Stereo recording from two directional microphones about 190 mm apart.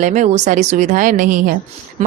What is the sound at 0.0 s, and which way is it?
Speech, 40° right (ahead or behind).